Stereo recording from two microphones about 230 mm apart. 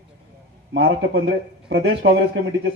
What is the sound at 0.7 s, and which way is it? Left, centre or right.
A man's voice, right.